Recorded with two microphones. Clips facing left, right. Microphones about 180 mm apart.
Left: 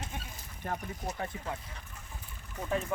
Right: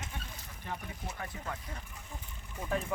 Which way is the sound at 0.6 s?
45° left (ahead or behind).